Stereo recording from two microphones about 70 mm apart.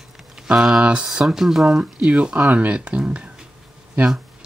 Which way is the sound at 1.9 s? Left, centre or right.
Centre.